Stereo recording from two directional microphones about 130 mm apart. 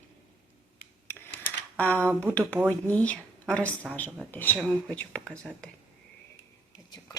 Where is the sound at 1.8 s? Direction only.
10° left (ahead or behind).